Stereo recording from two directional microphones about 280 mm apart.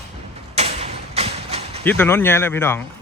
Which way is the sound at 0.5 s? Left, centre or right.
Right.